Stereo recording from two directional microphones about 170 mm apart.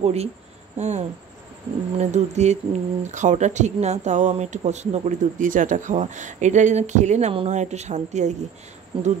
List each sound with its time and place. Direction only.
0.0 s speech: 40° right (ahead or behind)